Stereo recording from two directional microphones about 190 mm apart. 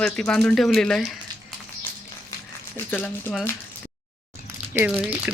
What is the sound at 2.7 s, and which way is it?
Speech, 10° left (ahead or behind).